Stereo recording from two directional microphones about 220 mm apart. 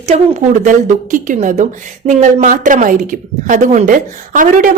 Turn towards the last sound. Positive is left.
turn(degrees=-40)  # may be behind; listen again after turning